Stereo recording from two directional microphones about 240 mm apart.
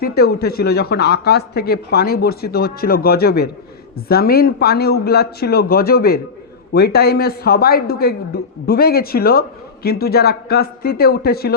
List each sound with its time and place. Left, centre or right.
0.0 s speech: left